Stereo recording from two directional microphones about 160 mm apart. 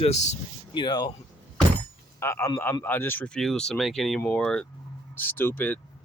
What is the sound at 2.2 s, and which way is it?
Speech, 15° left (ahead or behind).